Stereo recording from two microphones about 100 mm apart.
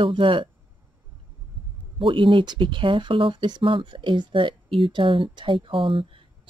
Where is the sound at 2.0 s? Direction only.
60° right (ahead or behind).